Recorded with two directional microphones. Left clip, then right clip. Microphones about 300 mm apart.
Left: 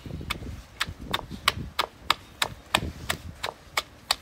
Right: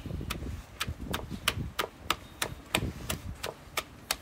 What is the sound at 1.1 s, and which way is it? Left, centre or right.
Chop, centre.